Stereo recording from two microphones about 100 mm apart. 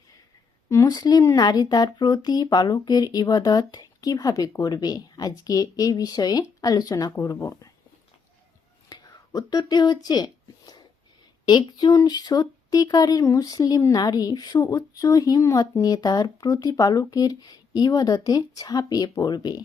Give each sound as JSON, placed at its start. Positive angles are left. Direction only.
{"t": 0.7, "sound": "speech", "side_deg": 30}
{"t": 0.9, "sound": "speech", "side_deg": 40}
{"t": 8.9, "sound": "speech", "side_deg": 40}